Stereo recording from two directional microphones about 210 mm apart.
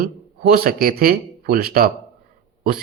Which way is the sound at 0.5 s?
45° right (ahead or behind).